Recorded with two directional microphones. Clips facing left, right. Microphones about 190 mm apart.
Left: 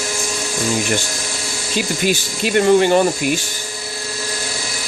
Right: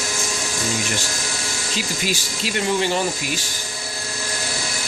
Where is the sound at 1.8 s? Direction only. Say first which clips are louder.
Left 8 dB; 55° left (ahead or behind).